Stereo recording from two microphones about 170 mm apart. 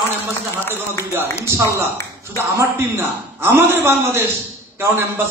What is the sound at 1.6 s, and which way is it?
A man's voice, 15° right (ahead or behind).